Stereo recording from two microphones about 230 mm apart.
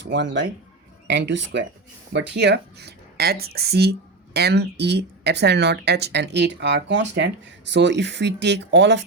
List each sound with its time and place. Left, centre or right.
0.0 s speech: right